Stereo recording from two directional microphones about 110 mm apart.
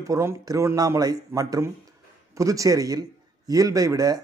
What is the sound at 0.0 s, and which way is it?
A man's voice, 25° right (ahead or behind).